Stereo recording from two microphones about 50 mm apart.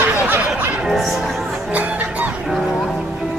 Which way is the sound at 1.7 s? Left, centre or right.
Right.